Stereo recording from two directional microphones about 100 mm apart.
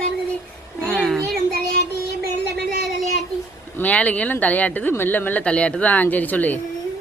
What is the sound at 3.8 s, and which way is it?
Speech, 15° left (ahead or behind).